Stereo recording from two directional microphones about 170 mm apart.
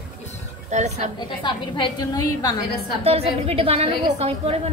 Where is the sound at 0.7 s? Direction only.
45° right (ahead or behind).